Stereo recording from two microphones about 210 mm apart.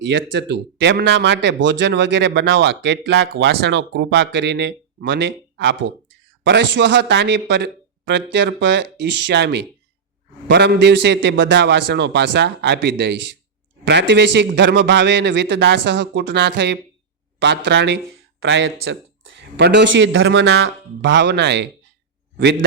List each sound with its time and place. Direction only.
0.0 s speech: 60° right (ahead or behind)